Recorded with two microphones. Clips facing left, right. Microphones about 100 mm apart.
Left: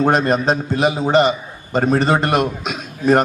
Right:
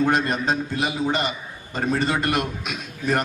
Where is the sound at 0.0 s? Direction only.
40° left (ahead or behind).